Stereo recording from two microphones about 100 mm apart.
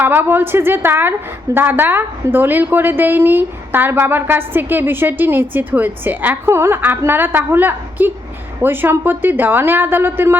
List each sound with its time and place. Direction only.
0.0 s a woman's voice: 20° right (ahead or behind)